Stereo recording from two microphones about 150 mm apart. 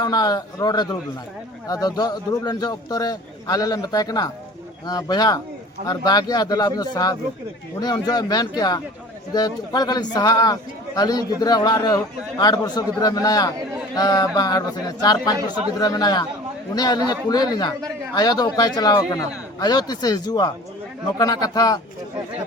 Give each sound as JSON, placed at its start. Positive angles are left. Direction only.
{"t": 0.0, "sound": "a man's voice", "side_deg": 25}